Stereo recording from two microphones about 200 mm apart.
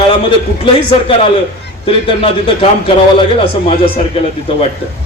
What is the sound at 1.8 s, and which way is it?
A man's voice, 25° left (ahead or behind).